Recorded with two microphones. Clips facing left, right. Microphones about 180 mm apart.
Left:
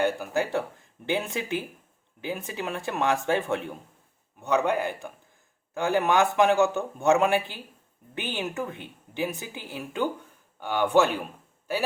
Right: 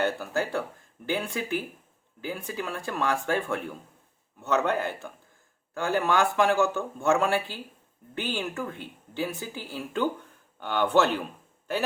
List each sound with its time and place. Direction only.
0.0 s a man's voice: 15° left (ahead or behind)